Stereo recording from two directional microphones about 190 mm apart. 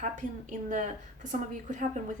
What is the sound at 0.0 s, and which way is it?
A woman's voice, 40° right (ahead or behind).